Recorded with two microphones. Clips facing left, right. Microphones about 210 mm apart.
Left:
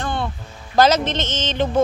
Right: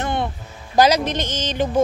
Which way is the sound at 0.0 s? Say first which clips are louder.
Right 2 dB; 20° right (ahead or behind).